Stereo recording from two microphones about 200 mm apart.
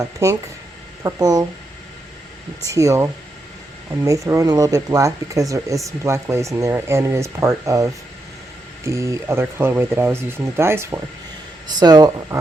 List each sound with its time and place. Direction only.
0.0 s speech: 15° right (ahead or behind)
2.6 s speech: 15° right (ahead or behind)